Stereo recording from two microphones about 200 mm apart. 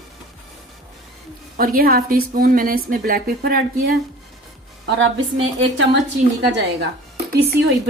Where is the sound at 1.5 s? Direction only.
45° right (ahead or behind).